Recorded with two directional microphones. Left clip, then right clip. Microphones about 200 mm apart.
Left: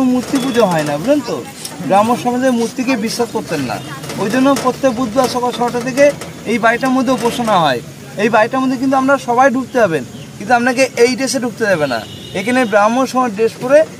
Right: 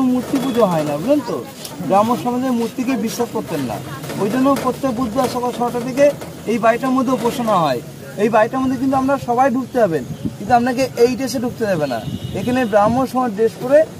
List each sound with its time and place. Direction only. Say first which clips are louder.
0.6 s speech: left 3 dB; 20° left (ahead or behind)
4.2 s speech: left 3 dB; 20° left (ahead or behind)